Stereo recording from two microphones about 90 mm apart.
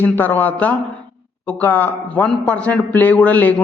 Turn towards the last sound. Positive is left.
turn(degrees=15)  # may be behind; listen again after turning